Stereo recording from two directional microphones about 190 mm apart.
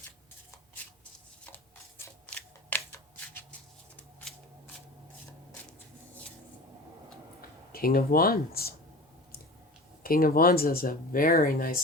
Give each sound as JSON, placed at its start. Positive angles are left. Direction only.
{"t": 1.5, "sound": "shuffling cards", "side_deg": 10}
{"t": 3.9, "sound": "scissors", "side_deg": 5}
{"t": 7.7, "sound": "speech", "side_deg": 50}
{"t": 10.0, "sound": "speech", "side_deg": 50}